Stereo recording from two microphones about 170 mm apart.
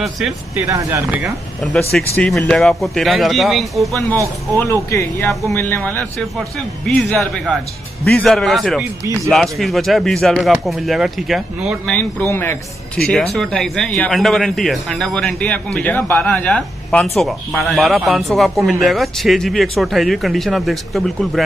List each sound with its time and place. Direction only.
0.6 s speech: 15° right (ahead or behind)
1.2 s speech: centre (ahead or behind)
4.6 s speech: 15° left (ahead or behind); by 21.4 s centre (ahead or behind)